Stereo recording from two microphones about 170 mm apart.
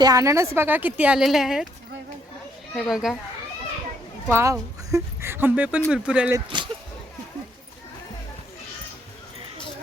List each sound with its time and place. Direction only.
0.0 s a woman's voice: 20° right (ahead or behind); by 1.6 s centre (ahead or behind)
2.7 s a child's voice: centre (ahead or behind)
4.3 s a woman's voice: 15° right (ahead or behind)
6.3 s speech: 25° right (ahead or behind)